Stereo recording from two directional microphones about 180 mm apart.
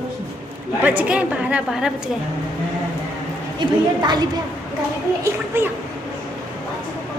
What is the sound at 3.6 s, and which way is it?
Speech, 25° right (ahead or behind).